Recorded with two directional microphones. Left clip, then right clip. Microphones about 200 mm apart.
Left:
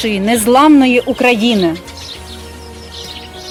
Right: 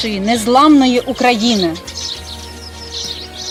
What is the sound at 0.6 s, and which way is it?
Speech, 15° left (ahead or behind).